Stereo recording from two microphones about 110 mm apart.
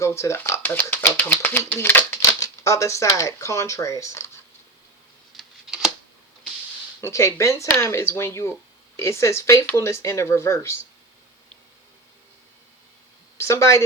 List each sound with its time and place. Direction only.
0.0 s speech: 25° left (ahead or behind)
2.2 s speech: 30° left (ahead or behind)
5.3 s a sound: centre (ahead or behind)
7.0 s speech: 30° left (ahead or behind)
13.3 s speech: 25° left (ahead or behind)